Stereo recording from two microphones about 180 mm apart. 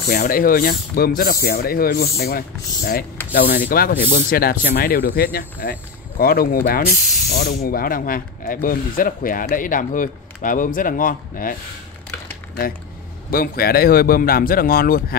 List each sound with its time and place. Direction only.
0.0 s speech: 60° left (ahead or behind)
13.3 s speech: 55° left (ahead or behind)